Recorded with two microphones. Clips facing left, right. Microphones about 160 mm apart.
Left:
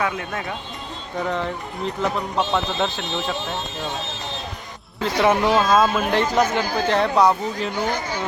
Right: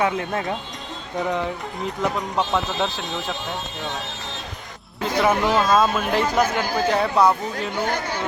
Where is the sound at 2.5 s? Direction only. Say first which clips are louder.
Left 1 dB; 5° right (ahead or behind).